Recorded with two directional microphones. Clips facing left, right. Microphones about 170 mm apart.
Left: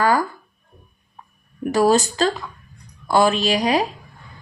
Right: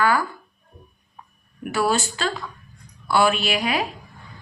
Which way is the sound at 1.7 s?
40° left (ahead or behind).